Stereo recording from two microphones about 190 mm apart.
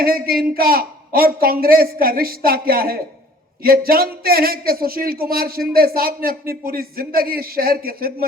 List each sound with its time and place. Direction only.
0.0 s a man's voice: 50° right (ahead or behind)